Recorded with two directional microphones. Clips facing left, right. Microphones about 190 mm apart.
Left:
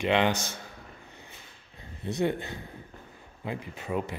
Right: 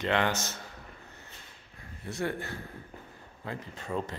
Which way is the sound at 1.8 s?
20° left (ahead or behind).